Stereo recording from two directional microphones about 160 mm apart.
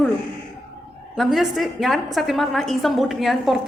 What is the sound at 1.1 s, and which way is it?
A woman's voice, centre (ahead or behind).